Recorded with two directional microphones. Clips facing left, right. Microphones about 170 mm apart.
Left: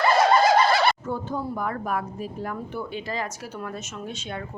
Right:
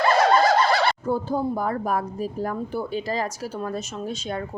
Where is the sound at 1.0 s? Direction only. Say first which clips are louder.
Right 5 dB; 35° right (ahead or behind).